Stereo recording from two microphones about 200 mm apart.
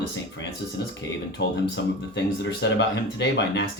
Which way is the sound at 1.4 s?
60° left (ahead or behind).